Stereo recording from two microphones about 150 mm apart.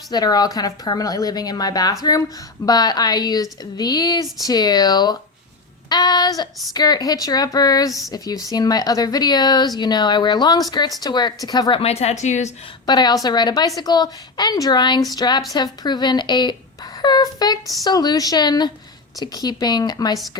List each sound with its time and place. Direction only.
0.1 s a woman's voice: 25° left (ahead or behind)
11.8 s speech: 45° left (ahead or behind)
12.8 s a woman's voice: 30° left (ahead or behind)